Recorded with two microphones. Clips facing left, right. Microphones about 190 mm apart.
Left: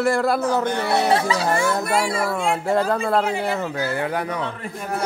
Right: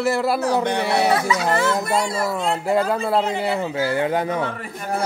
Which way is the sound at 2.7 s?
5° right (ahead or behind).